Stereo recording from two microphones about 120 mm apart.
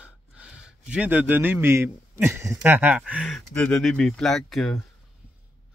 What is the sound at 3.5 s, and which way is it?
Speech, 10° left (ahead or behind).